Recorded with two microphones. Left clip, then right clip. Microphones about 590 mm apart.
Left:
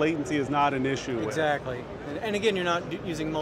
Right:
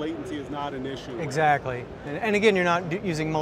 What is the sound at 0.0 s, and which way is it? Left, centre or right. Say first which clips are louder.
Speech: left 5 dB; left.